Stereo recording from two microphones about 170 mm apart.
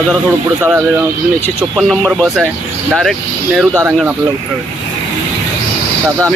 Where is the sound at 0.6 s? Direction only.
10° right (ahead or behind).